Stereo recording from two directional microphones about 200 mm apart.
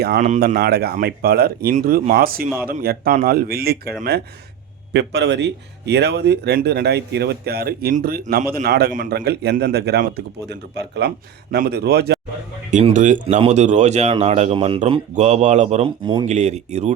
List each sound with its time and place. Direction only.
0.0 s speech: 50° right (ahead or behind)
4.9 s speech: 60° right (ahead or behind)
12.7 s speech: 40° right (ahead or behind)